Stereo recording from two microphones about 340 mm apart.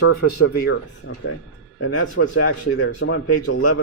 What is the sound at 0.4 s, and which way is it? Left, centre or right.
Speech, left.